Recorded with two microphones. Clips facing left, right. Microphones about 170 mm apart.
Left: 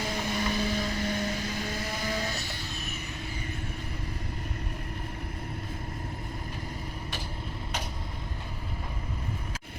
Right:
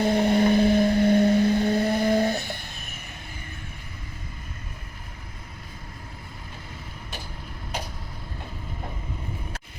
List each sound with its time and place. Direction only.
0.0 s vehicle: 60° right (ahead or behind)